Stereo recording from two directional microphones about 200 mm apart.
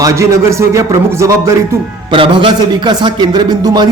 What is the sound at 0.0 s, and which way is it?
Speech, 15° right (ahead or behind).